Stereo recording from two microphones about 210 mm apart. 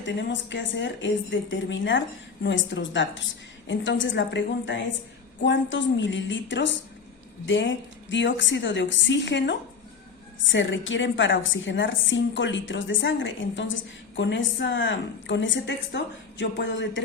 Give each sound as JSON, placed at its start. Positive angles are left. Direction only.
{"t": 0.0, "sound": "a woman's voice", "side_deg": 60}